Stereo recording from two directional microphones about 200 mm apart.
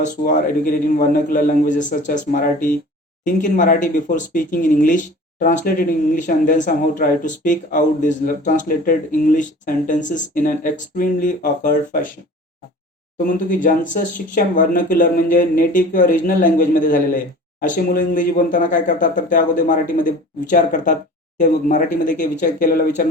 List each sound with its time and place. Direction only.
0.0 s a man's voice: 45° left (ahead or behind)
13.2 s speech: 40° left (ahead or behind)